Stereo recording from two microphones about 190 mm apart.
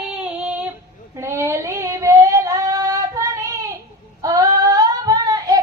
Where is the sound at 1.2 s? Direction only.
15° right (ahead or behind).